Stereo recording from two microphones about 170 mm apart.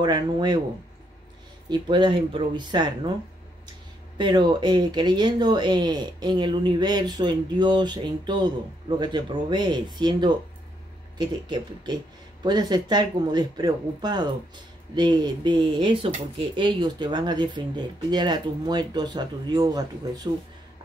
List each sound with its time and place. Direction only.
0.0 s speech: 25° right (ahead or behind)
1.7 s speech: 30° right (ahead or behind)
4.2 s speech: 25° right (ahead or behind)